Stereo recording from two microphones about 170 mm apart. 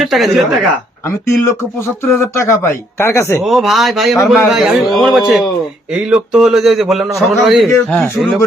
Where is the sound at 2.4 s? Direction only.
15° left (ahead or behind).